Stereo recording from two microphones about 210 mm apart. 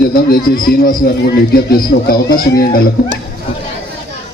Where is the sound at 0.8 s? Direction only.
45° left (ahead or behind).